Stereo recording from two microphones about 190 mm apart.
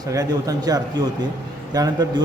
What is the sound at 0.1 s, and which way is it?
Speech, 20° right (ahead or behind).